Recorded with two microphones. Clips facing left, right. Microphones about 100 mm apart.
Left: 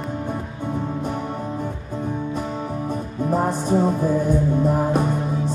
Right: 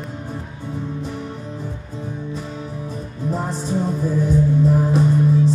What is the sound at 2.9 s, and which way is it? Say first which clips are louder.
Music: left 3 dB; 50° left (ahead or behind).